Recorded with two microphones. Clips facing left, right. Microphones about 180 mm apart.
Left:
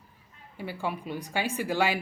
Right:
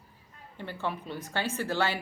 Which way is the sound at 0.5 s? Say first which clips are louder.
Left 2 dB; 10° left (ahead or behind).